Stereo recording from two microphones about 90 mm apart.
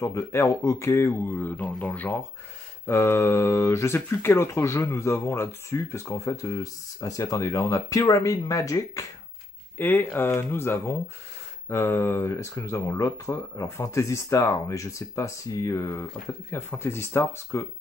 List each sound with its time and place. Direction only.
0.0 s speech: 30° left (ahead or behind)
9.8 s speech: 20° left (ahead or behind)